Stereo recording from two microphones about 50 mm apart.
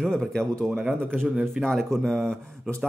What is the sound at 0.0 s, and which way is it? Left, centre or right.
Speech, centre.